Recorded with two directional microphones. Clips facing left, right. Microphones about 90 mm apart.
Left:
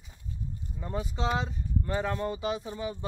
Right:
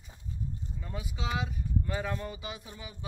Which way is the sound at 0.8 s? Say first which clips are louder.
Left 8 dB; 35° left (ahead or behind).